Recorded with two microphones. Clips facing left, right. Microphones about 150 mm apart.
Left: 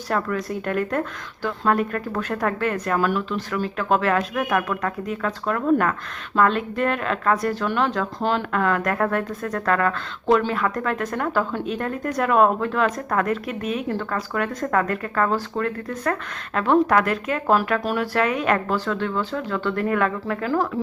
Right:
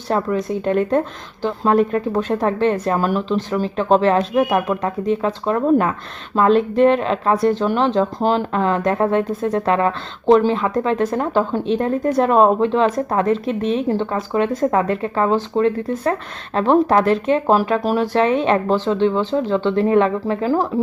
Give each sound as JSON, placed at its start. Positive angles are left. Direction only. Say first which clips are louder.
{"t": 0.1, "sound": "a woman's voice", "louder": "right 5 dB", "side_deg": -20}